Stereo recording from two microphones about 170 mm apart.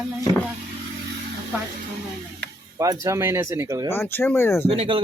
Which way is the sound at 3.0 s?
15° right (ahead or behind).